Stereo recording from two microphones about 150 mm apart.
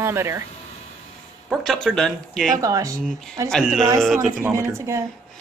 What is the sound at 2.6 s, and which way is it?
Speech, 20° right (ahead or behind).